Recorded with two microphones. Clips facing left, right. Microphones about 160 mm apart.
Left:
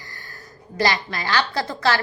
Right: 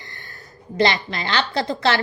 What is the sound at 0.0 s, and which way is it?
A woman's voice, 25° right (ahead or behind).